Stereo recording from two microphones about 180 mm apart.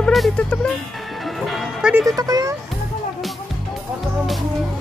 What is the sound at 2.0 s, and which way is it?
Speech, 20° right (ahead or behind).